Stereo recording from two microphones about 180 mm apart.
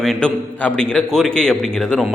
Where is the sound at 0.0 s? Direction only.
5° left (ahead or behind).